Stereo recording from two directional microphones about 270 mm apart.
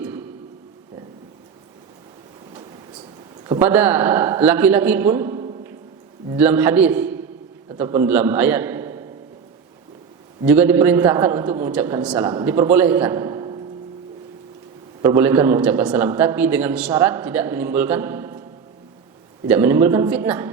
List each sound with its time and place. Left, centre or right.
3.4 s a man's voice: centre
10.4 s a man's voice: centre
15.0 s a man's voice: centre
19.5 s a man's voice: centre